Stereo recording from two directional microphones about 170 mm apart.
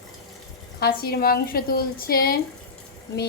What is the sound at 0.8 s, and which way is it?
A woman's voice, 65° left (ahead or behind).